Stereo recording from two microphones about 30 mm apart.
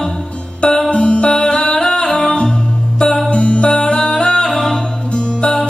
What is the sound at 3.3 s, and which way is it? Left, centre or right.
Music, left.